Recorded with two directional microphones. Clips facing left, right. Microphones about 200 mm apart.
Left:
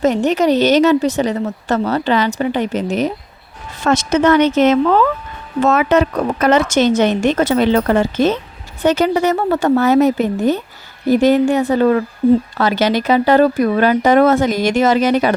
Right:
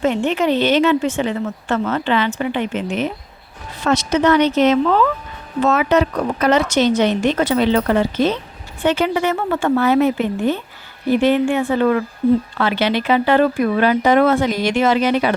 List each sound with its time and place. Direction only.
0.0 s speech: 40° left (ahead or behind)